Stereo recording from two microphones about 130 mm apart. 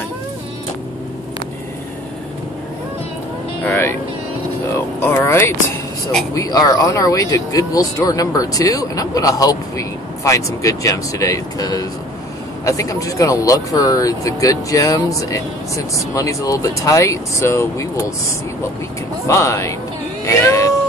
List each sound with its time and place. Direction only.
3.6 s music: 20° left (ahead or behind)
4.7 s a sound: 20° left (ahead or behind)
6.3 s speech: 25° left (ahead or behind)
19.2 s speech: 20° left (ahead or behind)